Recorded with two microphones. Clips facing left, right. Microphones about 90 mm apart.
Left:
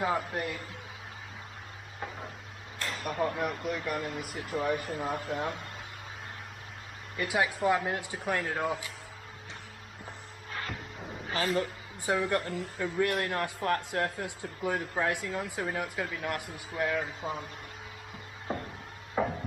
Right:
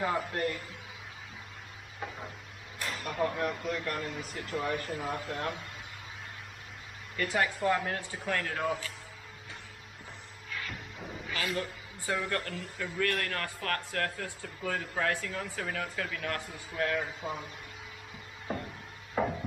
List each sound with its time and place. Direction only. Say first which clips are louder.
0.0 s speech: even; 10° left (ahead or behind)
2.0 s stir: even; 5° left (ahead or behind)
2.9 s speech: left 1 dB; centre (ahead or behind)
7.2 s speech: left 1 dB; 10° left (ahead or behind)
10.7 s music: left 2 dB; 5° left (ahead or behind)
11.2 s a sound: left 5 dB; 35° left (ahead or behind)
12.3 s speech: left 4 dB; 30° left (ahead or behind)
13.0 s speech: left 2 dB; 20° left (ahead or behind); by 17.5 s centre (ahead or behind)
19.1 s a sound: left 1 dB; 5° left (ahead or behind)